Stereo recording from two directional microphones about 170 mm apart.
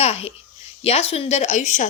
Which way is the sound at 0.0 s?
35° left (ahead or behind).